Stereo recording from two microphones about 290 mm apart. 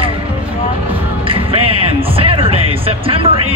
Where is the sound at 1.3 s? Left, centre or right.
Centre.